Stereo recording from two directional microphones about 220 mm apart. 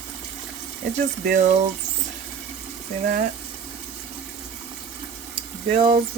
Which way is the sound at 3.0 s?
35° right (ahead or behind).